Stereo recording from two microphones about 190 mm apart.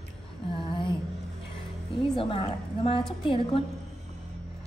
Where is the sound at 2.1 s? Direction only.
30° left (ahead or behind).